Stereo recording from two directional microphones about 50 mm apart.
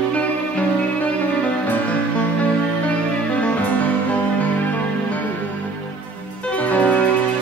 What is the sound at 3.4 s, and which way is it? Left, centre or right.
Music, left.